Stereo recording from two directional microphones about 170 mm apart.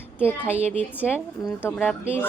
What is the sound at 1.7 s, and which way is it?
Speech, 10° left (ahead or behind).